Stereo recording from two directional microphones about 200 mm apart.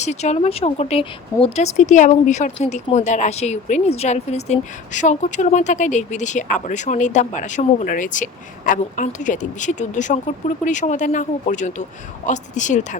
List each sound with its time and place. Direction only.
0.0 s speech: 35° left (ahead or behind)